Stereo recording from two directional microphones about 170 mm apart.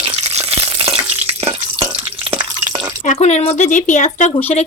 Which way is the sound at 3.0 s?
45° left (ahead or behind).